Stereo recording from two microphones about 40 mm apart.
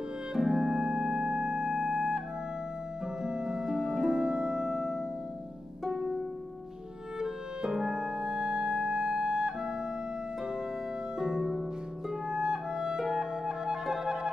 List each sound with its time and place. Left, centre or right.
0.3 s music: centre
0.7 s music: centre
3.2 s music: centre
5.9 s harp: centre
7.2 s music: centre
11.1 s music: centre
12.3 s clarinet: centre
13.0 s music: centre